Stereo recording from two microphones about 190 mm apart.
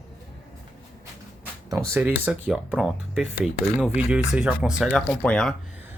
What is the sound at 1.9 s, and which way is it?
Speech, 10° right (ahead or behind).